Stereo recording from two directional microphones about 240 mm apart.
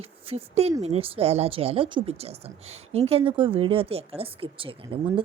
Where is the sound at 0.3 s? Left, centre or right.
Right.